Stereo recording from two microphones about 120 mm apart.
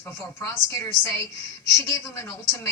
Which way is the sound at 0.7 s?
25° left (ahead or behind).